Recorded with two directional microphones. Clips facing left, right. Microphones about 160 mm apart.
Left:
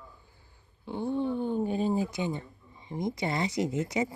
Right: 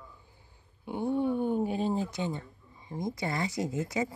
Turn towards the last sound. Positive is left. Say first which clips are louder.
# left 2 dB
turn(degrees=20)  # may be behind; listen again after turning